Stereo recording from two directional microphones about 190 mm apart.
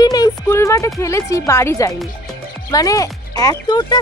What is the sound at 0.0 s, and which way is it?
Speech, 20° left (ahead or behind).